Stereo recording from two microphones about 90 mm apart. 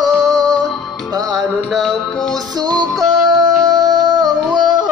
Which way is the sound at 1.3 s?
Centre (ahead or behind).